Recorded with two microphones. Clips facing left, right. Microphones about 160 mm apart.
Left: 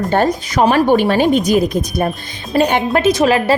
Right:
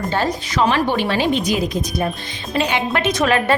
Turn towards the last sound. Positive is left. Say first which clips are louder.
# left 5 dB
turn(degrees=35)  # may be behind; listen again after turning